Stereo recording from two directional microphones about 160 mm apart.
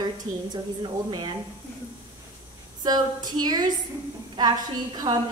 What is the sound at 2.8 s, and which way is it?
A woman's voice, 25° right (ahead or behind).